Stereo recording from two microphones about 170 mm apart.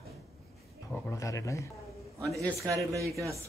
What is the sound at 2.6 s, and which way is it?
Speech, 20° right (ahead or behind).